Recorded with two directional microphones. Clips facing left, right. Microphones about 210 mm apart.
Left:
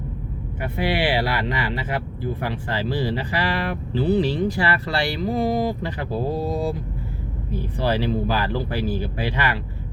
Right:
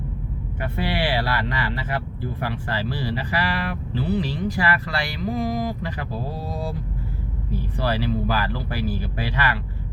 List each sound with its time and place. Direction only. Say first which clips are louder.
0.8 s speech: left 3 dB; 15° left (ahead or behind)
6.3 s speech: left 6 dB; 20° left (ahead or behind)
7.8 s speech: left 2 dB; 20° left (ahead or behind)